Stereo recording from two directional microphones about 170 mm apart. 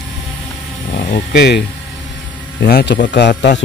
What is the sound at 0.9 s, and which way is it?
Speech, 65° left (ahead or behind).